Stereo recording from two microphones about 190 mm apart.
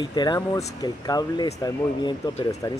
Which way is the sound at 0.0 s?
20° left (ahead or behind).